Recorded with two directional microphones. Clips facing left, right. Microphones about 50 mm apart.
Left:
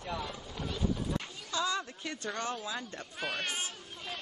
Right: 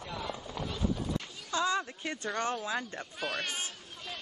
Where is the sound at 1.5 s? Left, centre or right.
Right.